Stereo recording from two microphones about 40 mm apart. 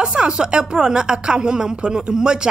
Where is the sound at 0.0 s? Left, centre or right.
Right.